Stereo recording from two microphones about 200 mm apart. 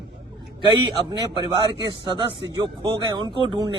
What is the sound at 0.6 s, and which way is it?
Speech, 20° right (ahead or behind).